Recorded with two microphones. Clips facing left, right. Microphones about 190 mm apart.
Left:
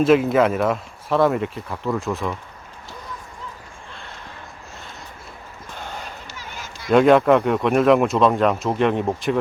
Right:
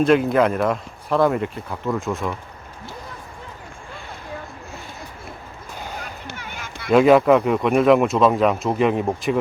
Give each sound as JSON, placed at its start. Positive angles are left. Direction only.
{"t": 0.0, "sound": "speech", "side_deg": 5}
{"t": 6.2, "sound": "a sound", "side_deg": -60}
{"t": 6.9, "sound": "speech", "side_deg": -5}